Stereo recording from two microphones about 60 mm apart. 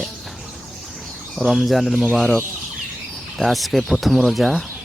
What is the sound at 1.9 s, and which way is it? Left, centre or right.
Speech, centre.